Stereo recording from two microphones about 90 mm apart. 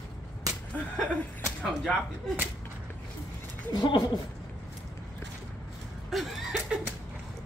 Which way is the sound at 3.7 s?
55° left (ahead or behind).